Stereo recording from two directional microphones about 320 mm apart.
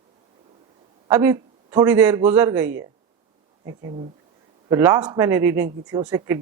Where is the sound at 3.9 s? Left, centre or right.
Centre.